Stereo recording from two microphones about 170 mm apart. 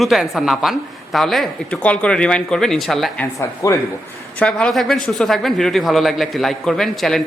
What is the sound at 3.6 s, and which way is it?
Speech, 20° left (ahead or behind).